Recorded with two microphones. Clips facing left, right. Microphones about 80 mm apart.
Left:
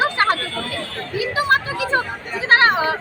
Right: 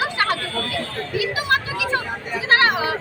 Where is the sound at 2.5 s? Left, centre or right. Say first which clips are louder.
Left 3 dB; left.